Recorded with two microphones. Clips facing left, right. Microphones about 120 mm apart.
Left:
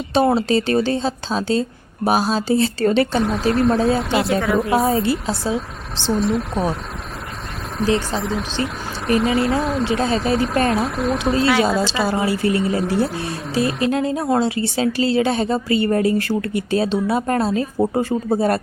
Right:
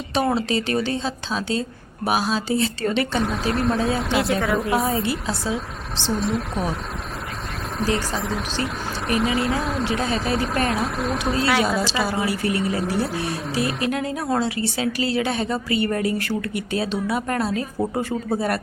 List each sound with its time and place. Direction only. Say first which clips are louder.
0.1 s a woman's voice: left 5 dB; 30° left (ahead or behind)
3.2 s speech: left 5 dB; centre (ahead or behind)
7.8 s speech: left 4 dB; centre (ahead or behind)
11.9 s a woman's voice: left 3 dB; 25° left (ahead or behind)
12.6 s speech: left 4 dB; centre (ahead or behind)
13.8 s a woman's voice: left 5 dB; 25° left (ahead or behind)